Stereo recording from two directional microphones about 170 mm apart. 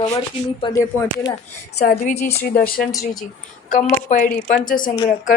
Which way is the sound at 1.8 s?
50° left (ahead or behind).